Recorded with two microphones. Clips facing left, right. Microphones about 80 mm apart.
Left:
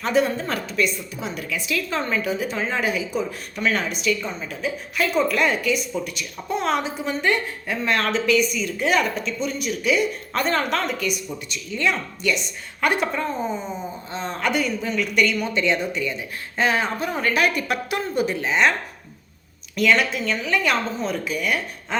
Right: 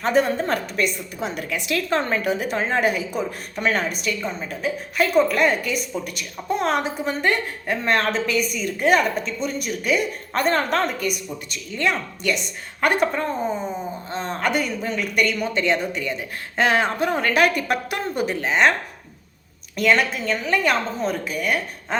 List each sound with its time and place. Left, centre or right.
0.0 s a woman's voice: right
3.5 s a woman's voice: right
11.0 s a woman's voice: right
16.6 s a woman's voice: right
19.7 s a woman's voice: right